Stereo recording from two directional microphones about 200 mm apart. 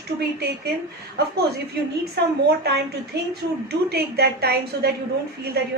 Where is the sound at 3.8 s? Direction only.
50° right (ahead or behind).